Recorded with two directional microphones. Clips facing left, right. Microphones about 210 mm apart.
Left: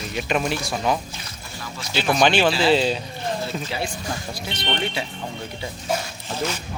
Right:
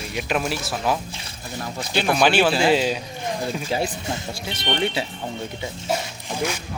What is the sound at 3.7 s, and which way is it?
Speech, 40° right (ahead or behind).